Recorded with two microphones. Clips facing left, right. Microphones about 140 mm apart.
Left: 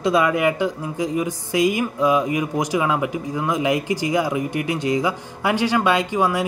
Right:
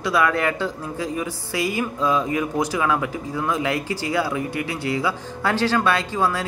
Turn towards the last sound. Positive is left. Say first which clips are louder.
# left 2 dB
turn(degrees=15)  # may be behind; listen again after turning